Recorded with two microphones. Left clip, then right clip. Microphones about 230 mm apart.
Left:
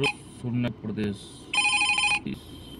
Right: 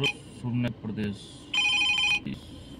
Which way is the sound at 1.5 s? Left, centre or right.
Left.